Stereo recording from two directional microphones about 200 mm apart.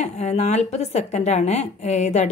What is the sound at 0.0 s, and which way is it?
A woman's voice, 35° left (ahead or behind).